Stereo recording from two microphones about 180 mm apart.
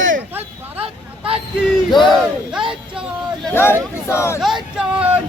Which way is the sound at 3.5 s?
10° left (ahead or behind).